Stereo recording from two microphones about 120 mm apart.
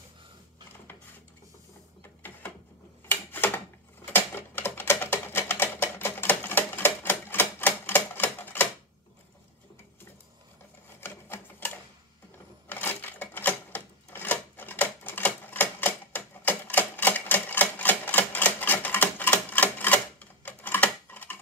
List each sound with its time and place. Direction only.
3.1 s typewriter: 15° left (ahead or behind)
11.0 s sewing machine: 20° left (ahead or behind)
12.6 s a sound: 15° left (ahead or behind)